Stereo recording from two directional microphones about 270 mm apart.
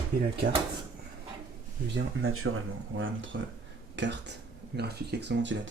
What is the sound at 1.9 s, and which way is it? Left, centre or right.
Speech, right.